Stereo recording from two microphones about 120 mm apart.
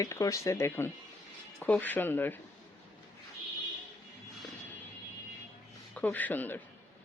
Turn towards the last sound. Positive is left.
turn(degrees=15)  # may be behind; listen again after turning